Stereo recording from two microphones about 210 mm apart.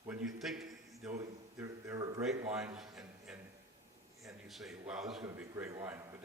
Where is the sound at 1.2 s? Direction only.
15° right (ahead or behind).